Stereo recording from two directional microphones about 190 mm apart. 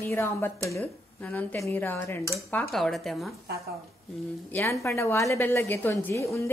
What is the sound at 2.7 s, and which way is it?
Speech, centre (ahead or behind).